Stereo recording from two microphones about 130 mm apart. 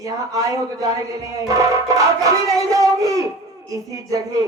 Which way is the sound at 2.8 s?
25° right (ahead or behind).